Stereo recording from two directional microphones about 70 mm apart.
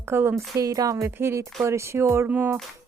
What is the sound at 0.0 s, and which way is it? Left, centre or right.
Speech, right.